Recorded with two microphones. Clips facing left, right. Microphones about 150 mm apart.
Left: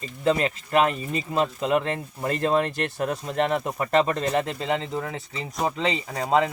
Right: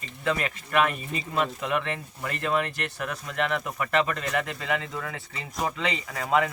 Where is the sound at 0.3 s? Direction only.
30° left (ahead or behind).